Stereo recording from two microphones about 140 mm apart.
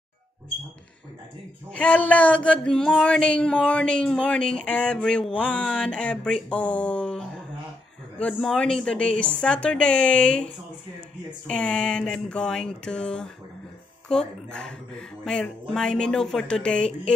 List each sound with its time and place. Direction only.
1.7 s speech: 10° left (ahead or behind)